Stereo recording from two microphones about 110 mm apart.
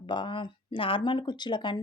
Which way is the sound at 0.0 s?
50° left (ahead or behind).